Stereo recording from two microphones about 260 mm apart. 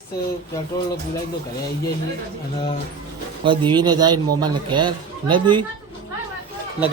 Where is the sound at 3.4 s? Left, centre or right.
Centre.